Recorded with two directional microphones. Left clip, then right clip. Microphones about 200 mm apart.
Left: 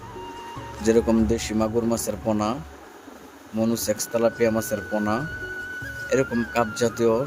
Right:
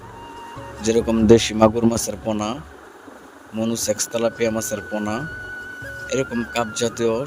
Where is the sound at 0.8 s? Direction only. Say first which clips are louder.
Right 1 dB; 35° right (ahead or behind).